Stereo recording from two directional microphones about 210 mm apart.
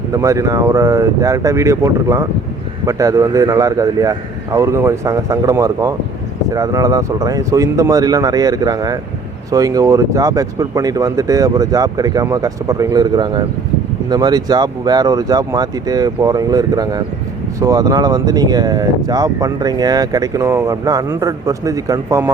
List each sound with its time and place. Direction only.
0.1 s speech: 15° right (ahead or behind)